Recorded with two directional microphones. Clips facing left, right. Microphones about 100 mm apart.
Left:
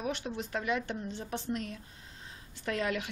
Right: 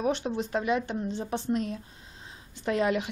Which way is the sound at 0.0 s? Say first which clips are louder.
Right 7 dB; 30° right (ahead or behind).